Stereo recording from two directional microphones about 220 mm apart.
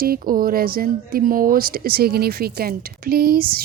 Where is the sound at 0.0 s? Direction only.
40° right (ahead or behind).